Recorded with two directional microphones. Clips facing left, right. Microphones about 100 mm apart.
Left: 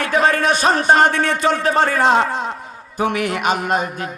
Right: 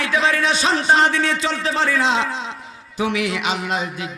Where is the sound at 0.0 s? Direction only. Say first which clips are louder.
Left 3 dB; 50° left (ahead or behind).